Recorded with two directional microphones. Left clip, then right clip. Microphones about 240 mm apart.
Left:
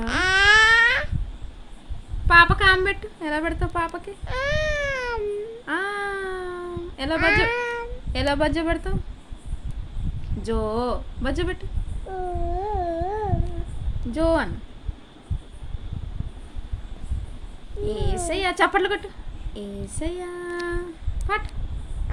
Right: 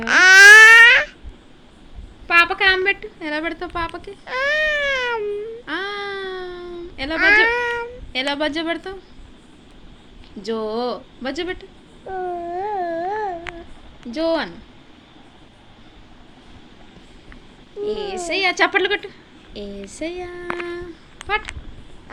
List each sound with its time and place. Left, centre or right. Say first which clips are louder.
0.0 s babbling: right 11 dB; centre
2.2 s a sound: even; left
4.3 s baby cry: right 6 dB; centre
5.6 s a sound: left 2 dB; left
7.2 s meow: right 6 dB; centre
8.1 s a child's voice: right 1 dB; left
10.4 s a child's voice: right 2 dB; left
12.5 s a sound: right 2 dB; centre
14.1 s a child's voice: right 1 dB; left
17.8 s a child's voice: right 3 dB; left
19.5 s child singing: right 3 dB; left